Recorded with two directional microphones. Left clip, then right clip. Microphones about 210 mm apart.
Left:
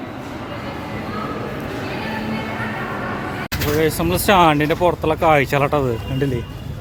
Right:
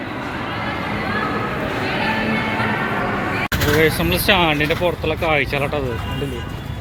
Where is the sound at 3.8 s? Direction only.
20° left (ahead or behind).